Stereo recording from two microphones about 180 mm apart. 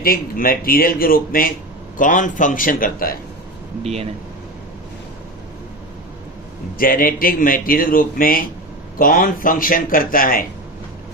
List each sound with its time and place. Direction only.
0.0 s speech: 55° left (ahead or behind)
6.7 s speech: 50° left (ahead or behind)